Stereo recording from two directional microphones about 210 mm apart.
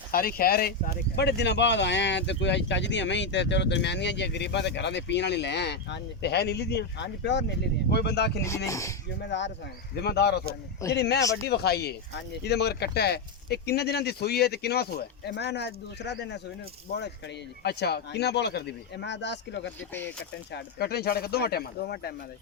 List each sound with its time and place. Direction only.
0.1 s speech: 45° left (ahead or behind)
8.4 s speech: 15° left (ahead or behind)
9.2 s speech: 55° left (ahead or behind)
17.6 s speech: 50° left (ahead or behind)
19.9 s speech: 10° left (ahead or behind)
20.5 s speech: 50° left (ahead or behind)